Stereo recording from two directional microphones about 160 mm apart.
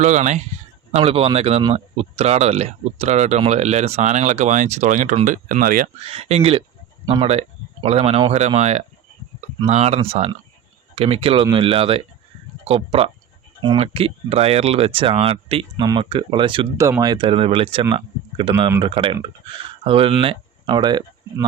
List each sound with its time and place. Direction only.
0.0 s speech: 50° right (ahead or behind)
6.1 s speech: 40° right (ahead or behind)